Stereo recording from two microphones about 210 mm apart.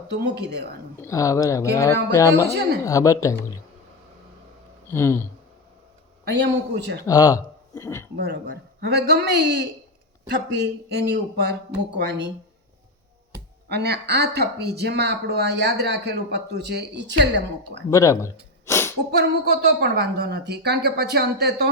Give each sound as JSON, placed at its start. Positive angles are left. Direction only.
{"t": 0.2, "sound": "speech", "side_deg": -50}
{"t": 1.0, "sound": "speech", "side_deg": 15}
{"t": 4.9, "sound": "speech", "side_deg": 10}
{"t": 6.2, "sound": "speech", "side_deg": -55}
{"t": 7.1, "sound": "speech", "side_deg": 15}
{"t": 8.1, "sound": "speech", "side_deg": -50}
{"t": 13.7, "sound": "speech", "side_deg": -50}
{"t": 17.9, "sound": "gasp", "side_deg": 15}
{"t": 19.1, "sound": "speech", "side_deg": -50}